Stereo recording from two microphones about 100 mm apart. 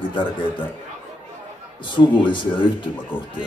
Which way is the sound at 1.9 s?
55° left (ahead or behind).